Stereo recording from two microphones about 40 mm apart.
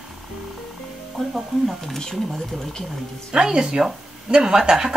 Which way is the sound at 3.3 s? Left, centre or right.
Centre.